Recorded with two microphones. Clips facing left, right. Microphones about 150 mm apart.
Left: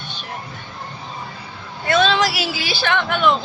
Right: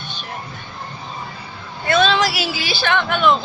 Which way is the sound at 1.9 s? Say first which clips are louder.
Even; centre (ahead or behind).